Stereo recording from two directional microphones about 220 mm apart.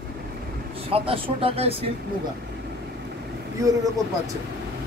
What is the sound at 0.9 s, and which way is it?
Speech, 25° right (ahead or behind).